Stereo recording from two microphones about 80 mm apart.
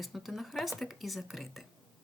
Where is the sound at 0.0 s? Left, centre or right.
Centre.